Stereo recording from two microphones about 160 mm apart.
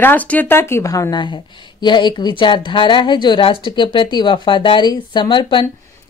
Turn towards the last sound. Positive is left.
turn(degrees=30)  # may be behind; listen again after turning